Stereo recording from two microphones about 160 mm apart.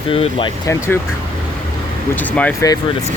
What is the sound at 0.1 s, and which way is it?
Speech, 35° left (ahead or behind).